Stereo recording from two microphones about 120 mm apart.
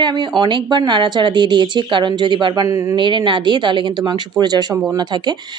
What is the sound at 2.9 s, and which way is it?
Speech, 40° right (ahead or behind).